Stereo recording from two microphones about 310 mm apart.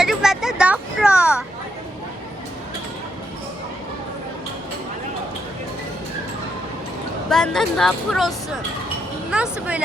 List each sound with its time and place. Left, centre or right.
0.0 s a sound: centre
7.3 s speech: centre
9.3 s speech: centre